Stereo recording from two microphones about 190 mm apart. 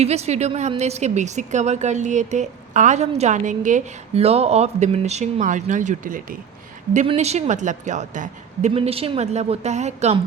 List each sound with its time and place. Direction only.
0.0 s speech: 35° right (ahead or behind)
8.7 s speech: 30° right (ahead or behind)